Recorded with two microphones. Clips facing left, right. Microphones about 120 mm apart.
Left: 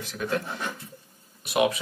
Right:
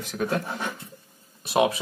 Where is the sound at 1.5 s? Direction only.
30° right (ahead or behind).